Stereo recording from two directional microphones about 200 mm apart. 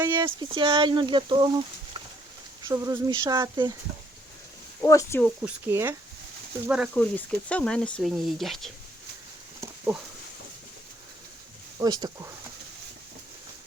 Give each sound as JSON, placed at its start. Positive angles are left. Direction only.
{"t": 0.0, "sound": "speech", "side_deg": -10}
{"t": 0.3, "sound": "speech", "side_deg": -25}
{"t": 4.8, "sound": "speech", "side_deg": 15}
{"t": 5.5, "sound": "speech", "side_deg": -10}
{"t": 6.9, "sound": "speech", "side_deg": 5}
{"t": 9.6, "sound": "a sound", "side_deg": -10}
{"t": 11.8, "sound": "speech", "side_deg": -20}